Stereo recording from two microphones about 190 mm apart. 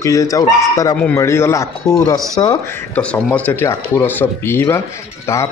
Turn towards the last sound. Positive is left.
turn(degrees=15)  # may be behind; listen again after turning